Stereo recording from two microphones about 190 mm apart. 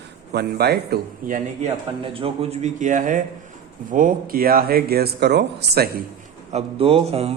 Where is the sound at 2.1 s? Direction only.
30° right (ahead or behind); by 6.0 s 60° right (ahead or behind).